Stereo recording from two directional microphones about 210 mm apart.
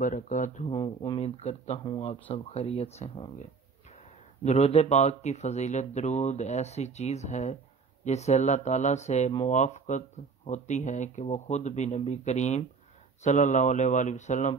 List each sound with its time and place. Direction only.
0.0 s speech: 35° left (ahead or behind)
0.7 s speech: 20° left (ahead or behind)
4.5 s speech: 30° left (ahead or behind)